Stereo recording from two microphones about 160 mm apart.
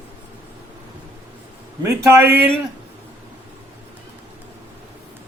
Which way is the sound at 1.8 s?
15° right (ahead or behind).